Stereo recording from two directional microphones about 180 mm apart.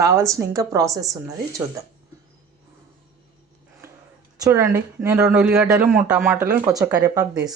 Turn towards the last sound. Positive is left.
turn(degrees=-20)  # may be behind; listen again after turning